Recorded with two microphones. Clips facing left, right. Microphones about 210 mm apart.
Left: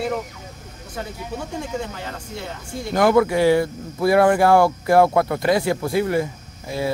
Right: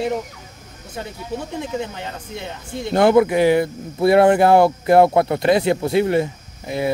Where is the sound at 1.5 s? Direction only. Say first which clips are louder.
Right 1 dB; 20° right (ahead or behind).